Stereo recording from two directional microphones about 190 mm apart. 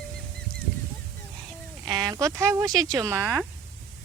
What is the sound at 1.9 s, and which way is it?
Speech, 20° right (ahead or behind).